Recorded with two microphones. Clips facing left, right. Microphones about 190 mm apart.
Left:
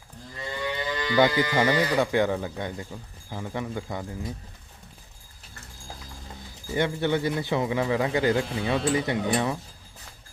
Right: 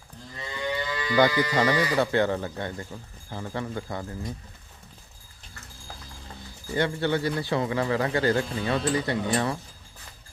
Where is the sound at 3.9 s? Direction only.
Centre (ahead or behind).